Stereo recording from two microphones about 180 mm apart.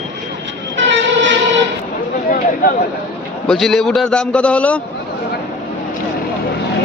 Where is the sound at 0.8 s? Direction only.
90° right.